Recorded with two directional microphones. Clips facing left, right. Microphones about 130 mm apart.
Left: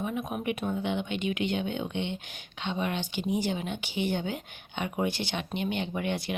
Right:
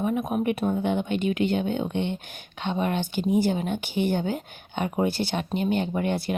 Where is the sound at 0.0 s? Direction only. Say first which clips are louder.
Right 7 dB; 45° right (ahead or behind).